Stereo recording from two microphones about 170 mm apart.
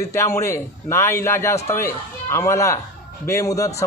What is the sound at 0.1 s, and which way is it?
Speech, 15° left (ahead or behind).